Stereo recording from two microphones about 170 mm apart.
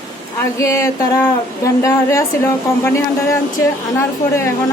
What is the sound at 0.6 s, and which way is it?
A woman's voice, 15° left (ahead or behind).